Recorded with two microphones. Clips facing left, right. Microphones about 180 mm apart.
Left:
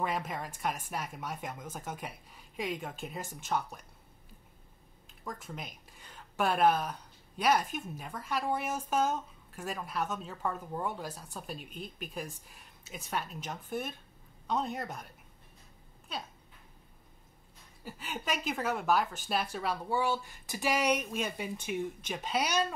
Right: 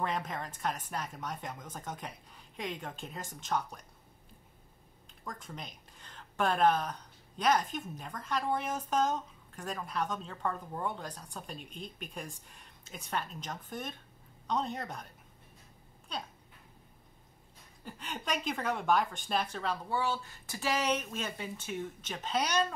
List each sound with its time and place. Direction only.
0.0 s speech: 5° left (ahead or behind)
5.2 s speech: 5° left (ahead or behind)
16.1 s a sound: 5° left (ahead or behind)
17.8 s speech: 5° left (ahead or behind)